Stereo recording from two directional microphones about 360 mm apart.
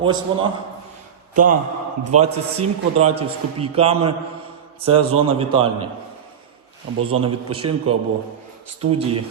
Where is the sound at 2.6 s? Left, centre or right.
Centre.